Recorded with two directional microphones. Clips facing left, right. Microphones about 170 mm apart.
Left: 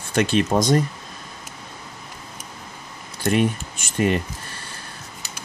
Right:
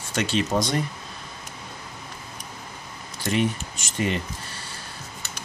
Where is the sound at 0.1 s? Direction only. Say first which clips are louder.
Left 5 dB; 55° left (ahead or behind).